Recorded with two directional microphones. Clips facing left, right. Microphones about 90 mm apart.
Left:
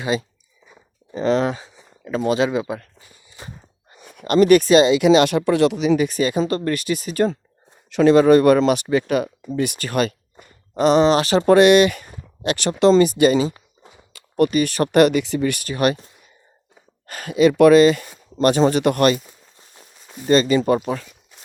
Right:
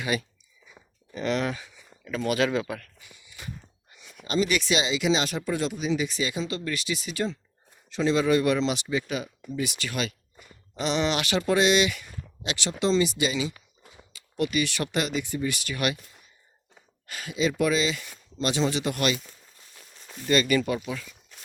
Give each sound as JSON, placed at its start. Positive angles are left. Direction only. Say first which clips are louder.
{"t": 0.0, "sound": "speech", "louder": "left 6 dB", "side_deg": 30}
{"t": 3.1, "sound": "walk", "louder": "left 2 dB", "side_deg": 35}
{"t": 3.9, "sound": "speech", "louder": "left 10 dB", "side_deg": 50}
{"t": 7.9, "sound": "speech", "louder": "left 10 dB", "side_deg": 65}
{"t": 11.5, "sound": "speech", "louder": "left 10 dB", "side_deg": 60}
{"t": 13.9, "sound": "a sound", "louder": "left 11 dB", "side_deg": 55}
{"t": 14.9, "sound": "speech", "louder": "left 15 dB", "side_deg": 65}
{"t": 15.6, "sound": "speech", "louder": "left 9 dB", "side_deg": 40}
{"t": 17.1, "sound": "speech", "louder": "left 11 dB", "side_deg": 50}
{"t": 19.5, "sound": "walk", "louder": "left 4 dB", "side_deg": 30}
{"t": 20.2, "sound": "speech", "louder": "left 7 dB", "side_deg": 35}
{"t": 20.7, "sound": "speech", "louder": "left 10 dB", "side_deg": 45}